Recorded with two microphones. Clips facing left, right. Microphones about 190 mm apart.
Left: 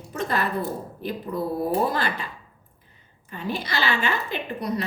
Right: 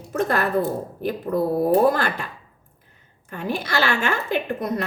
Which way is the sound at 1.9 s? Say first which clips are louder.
Right 5 dB; 50° right (ahead or behind).